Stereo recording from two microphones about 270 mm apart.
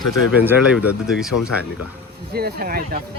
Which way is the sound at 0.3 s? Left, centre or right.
Centre.